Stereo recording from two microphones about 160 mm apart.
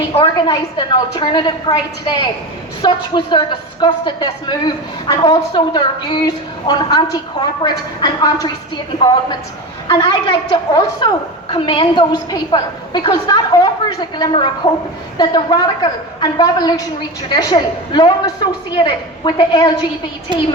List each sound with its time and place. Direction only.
0.1 s a woman's voice: 30° left (ahead or behind)
9.9 s a woman's voice: 30° left (ahead or behind)
20.3 s a woman's voice: 30° right (ahead or behind)